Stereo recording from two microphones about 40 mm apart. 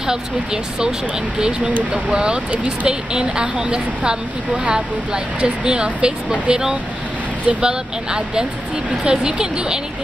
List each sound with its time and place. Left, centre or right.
0.0 s speech: centre
2.0 s speech: right